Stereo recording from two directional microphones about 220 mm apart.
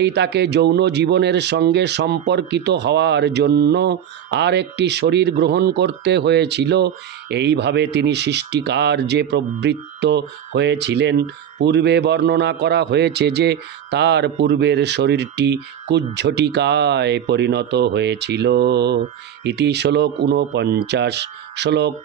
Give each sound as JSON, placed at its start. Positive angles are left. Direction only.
{"t": 0.0, "sound": "a man's voice", "side_deg": -50}